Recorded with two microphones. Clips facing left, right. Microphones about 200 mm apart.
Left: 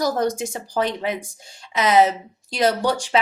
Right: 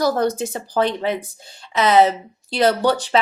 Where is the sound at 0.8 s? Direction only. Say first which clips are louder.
Right 3 dB; 30° right (ahead or behind).